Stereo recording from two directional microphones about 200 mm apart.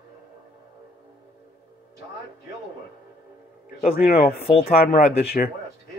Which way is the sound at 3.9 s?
45° left (ahead or behind).